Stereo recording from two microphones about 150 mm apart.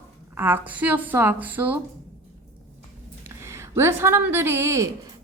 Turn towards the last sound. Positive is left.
turn(degrees=-20)  # may be behind; listen again after turning